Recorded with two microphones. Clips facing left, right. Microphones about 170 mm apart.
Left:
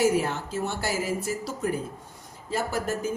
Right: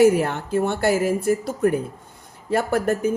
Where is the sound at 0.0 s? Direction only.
60° right (ahead or behind).